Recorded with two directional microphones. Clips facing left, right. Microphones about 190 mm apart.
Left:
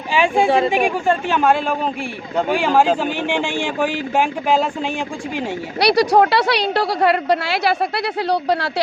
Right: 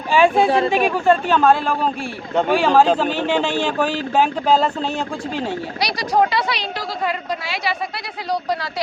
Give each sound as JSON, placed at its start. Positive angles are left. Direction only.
{"t": 0.1, "sound": "speech", "side_deg": 15}
{"t": 5.8, "sound": "a woman's voice", "side_deg": 65}